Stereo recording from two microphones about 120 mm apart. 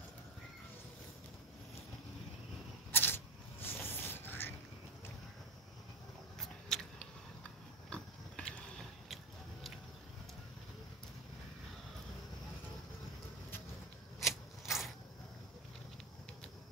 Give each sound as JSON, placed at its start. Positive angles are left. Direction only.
{"t": 2.9, "sound": "a sound", "side_deg": 20}
{"t": 3.6, "sound": "mechanisms", "side_deg": 20}
{"t": 6.7, "sound": "vehicle", "side_deg": 5}
{"t": 7.9, "sound": "biting", "side_deg": 10}
{"t": 9.1, "sound": "a sound", "side_deg": 0}
{"t": 14.2, "sound": "ratchet", "side_deg": 0}